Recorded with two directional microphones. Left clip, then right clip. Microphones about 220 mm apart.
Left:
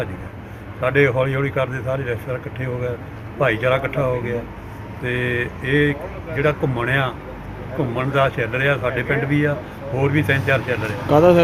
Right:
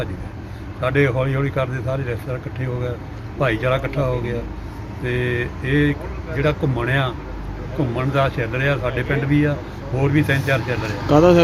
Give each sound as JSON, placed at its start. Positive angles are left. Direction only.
{"t": 0.8, "sound": "speech", "side_deg": 0}
{"t": 3.4, "sound": "speech", "side_deg": 5}
{"t": 10.8, "sound": "speech", "side_deg": 55}
{"t": 11.1, "sound": "speech", "side_deg": -5}